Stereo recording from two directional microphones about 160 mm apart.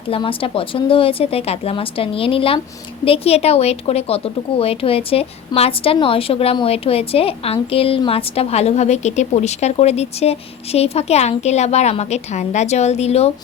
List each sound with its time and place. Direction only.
0.1 s speech: 35° left (ahead or behind)